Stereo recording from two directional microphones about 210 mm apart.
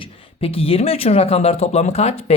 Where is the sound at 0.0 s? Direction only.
25° left (ahead or behind).